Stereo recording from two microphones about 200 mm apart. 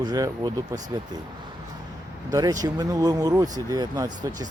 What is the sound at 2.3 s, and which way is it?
Speech, 20° right (ahead or behind).